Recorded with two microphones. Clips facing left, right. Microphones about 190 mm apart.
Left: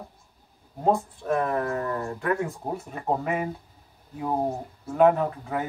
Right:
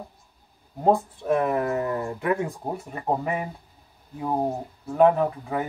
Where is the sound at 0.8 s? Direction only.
10° right (ahead or behind).